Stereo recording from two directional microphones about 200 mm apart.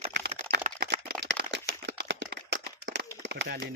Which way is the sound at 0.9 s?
50° right (ahead or behind).